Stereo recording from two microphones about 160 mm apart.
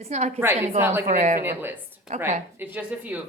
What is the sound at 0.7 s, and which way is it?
A woman's voice, 15° right (ahead or behind).